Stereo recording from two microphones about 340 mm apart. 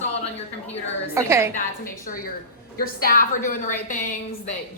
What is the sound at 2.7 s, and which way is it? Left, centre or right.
Speech, left.